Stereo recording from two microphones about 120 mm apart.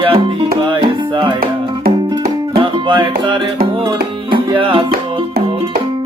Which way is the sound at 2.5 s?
45° right (ahead or behind).